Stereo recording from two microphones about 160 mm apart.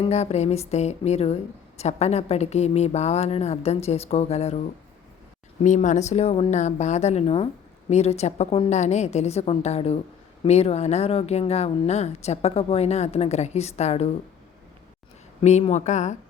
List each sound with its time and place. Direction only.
0.0 s a woman's voice: 40° left (ahead or behind)
5.6 s a woman's voice: 50° left (ahead or behind)
15.4 s a woman's voice: 40° left (ahead or behind)